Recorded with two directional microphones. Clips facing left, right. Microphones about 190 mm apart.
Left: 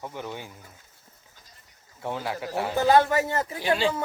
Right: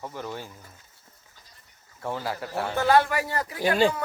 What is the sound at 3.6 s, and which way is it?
Speech, 45° right (ahead or behind).